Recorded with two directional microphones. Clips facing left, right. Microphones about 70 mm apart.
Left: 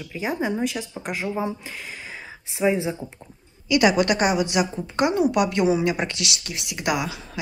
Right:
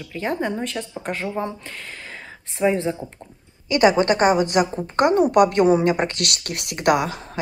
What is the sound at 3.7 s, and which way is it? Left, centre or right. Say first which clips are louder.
A woman's voice: right 2 dB; right.